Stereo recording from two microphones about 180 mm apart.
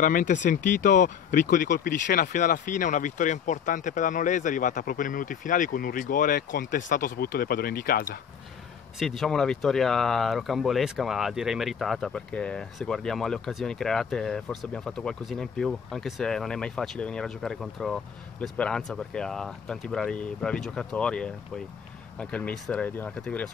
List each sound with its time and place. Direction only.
0.0 s speech: 45° left (ahead or behind)
9.0 s speech: centre (ahead or behind)